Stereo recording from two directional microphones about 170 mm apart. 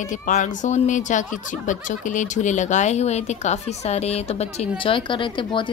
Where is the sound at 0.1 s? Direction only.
45° left (ahead or behind).